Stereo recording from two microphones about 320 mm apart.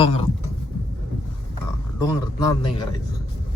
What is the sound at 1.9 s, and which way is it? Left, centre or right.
Speech, centre.